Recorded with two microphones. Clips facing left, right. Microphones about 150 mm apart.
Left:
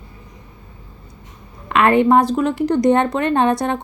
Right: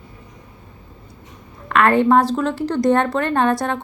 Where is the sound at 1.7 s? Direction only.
20° left (ahead or behind).